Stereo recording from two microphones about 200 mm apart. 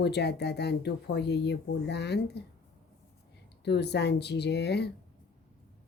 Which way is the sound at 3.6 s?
55° left (ahead or behind).